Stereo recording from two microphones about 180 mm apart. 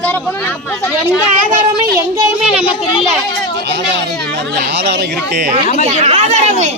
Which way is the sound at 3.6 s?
75° right (ahead or behind).